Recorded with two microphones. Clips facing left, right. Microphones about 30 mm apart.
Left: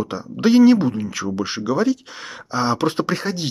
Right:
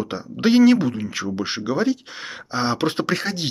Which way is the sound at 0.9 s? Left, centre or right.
Right.